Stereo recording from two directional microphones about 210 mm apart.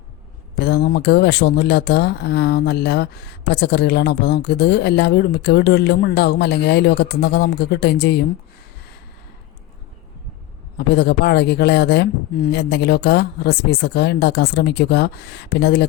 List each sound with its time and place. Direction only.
0.6 s speech: 50° left (ahead or behind)
10.8 s speech: 50° left (ahead or behind)